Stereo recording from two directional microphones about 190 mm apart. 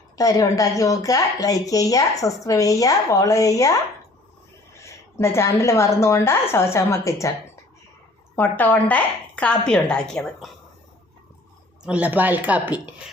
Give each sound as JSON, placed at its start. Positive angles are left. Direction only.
{"t": 0.2, "sound": "speech", "side_deg": 20}
{"t": 4.8, "sound": "a woman's voice", "side_deg": 15}
{"t": 8.4, "sound": "speech", "side_deg": 10}
{"t": 11.8, "sound": "speech", "side_deg": -5}